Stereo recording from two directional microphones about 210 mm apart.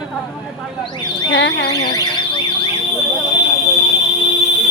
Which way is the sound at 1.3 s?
60° left (ahead or behind).